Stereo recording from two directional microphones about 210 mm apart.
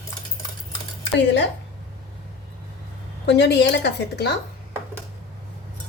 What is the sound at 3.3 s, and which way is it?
A woman's voice, 55° left (ahead or behind).